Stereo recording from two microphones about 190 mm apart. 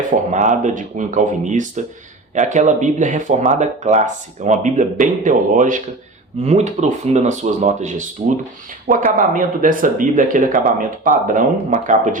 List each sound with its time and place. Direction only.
0.3 s speech: 40° right (ahead or behind)